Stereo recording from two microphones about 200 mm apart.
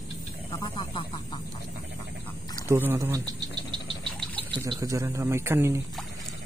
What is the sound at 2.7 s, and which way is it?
Speech, 10° right (ahead or behind).